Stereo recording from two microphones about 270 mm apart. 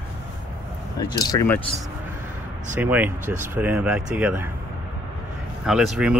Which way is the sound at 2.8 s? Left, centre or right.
Centre.